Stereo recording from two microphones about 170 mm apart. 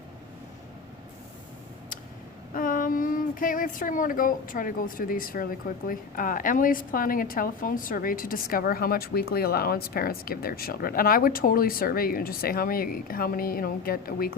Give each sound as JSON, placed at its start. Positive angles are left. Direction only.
{"t": 2.6, "sound": "speech", "side_deg": 55}